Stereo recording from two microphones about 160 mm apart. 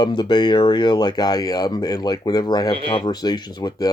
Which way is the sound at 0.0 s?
25° left (ahead or behind).